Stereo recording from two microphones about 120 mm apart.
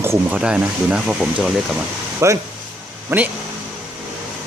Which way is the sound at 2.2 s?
20° right (ahead or behind).